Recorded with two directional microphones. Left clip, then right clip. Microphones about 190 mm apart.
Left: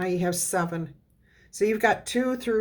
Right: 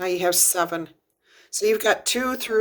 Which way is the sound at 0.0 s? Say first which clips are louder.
Right 6 dB; 35° right (ahead or behind).